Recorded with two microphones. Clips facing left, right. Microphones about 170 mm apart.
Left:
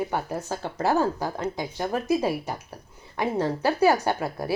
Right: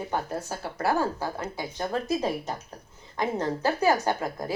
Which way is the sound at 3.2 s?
15° left (ahead or behind).